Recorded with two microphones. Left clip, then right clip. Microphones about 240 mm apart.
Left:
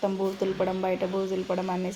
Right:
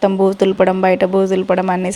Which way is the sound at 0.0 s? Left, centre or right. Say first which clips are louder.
Right 14 dB; right.